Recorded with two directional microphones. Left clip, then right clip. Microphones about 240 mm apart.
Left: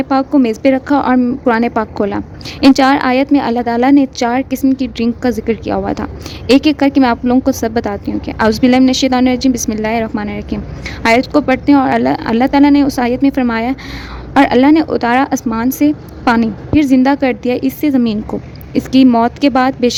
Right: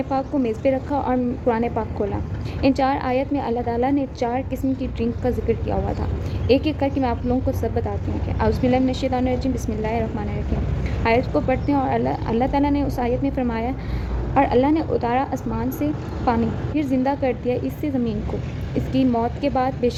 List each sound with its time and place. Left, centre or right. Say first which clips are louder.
0.0 s a woman's voice: left 10 dB; left